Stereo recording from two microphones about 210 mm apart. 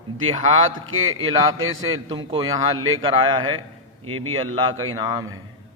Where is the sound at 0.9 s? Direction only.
75° right (ahead or behind).